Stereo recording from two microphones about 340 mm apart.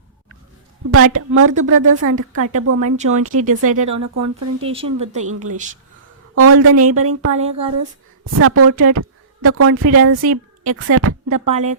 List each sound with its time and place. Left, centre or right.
0.9 s a woman's voice: right
1.5 s a woman's voice: right
3.8 s speech: right
4.6 s speech: centre
5.2 s a woman's voice: right
7.3 s speech: centre
7.8 s a woman's voice: right
11.4 s a woman's voice: centre